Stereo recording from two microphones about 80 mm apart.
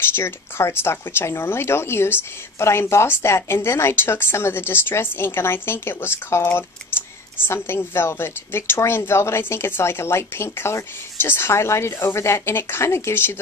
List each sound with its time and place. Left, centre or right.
0.1 s speech: left